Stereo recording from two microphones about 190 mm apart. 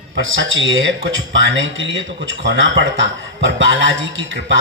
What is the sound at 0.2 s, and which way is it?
Speech, 85° right.